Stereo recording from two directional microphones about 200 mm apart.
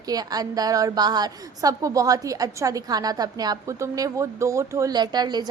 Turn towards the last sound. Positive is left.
turn(degrees=-20)  # may be behind; listen again after turning